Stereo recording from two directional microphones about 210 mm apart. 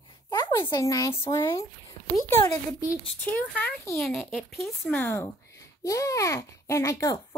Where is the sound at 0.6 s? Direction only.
15° left (ahead or behind).